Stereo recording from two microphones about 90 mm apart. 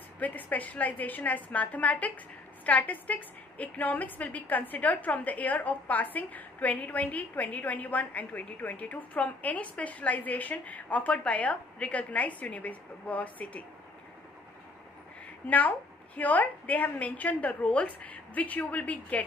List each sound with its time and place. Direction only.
0.2 s a woman's voice: 20° left (ahead or behind)
15.4 s a woman's voice: 15° left (ahead or behind)